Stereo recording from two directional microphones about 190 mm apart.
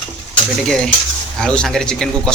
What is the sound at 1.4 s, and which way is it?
Speech, 5° left (ahead or behind).